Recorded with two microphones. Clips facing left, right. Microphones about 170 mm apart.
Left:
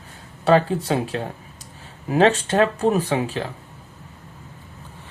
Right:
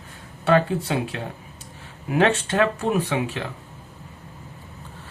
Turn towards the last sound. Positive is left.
turn(degrees=35)  # may be behind; listen again after turning